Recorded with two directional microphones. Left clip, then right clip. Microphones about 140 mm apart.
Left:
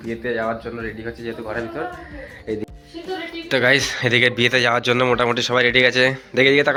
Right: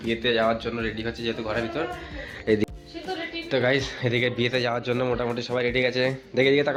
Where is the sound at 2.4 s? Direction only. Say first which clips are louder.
Right 4 dB; 90° right.